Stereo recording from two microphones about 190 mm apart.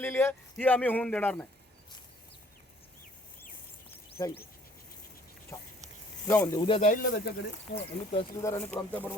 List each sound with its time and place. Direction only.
0.0 s a man's voice: 10° left (ahead or behind)
4.1 s speech: 10° left (ahead or behind)
5.5 s a man's voice: 15° left (ahead or behind)
6.7 s speech: 30° left (ahead or behind)
6.9 s speech: 50° left (ahead or behind)
8.4 s a man's voice: 15° left (ahead or behind)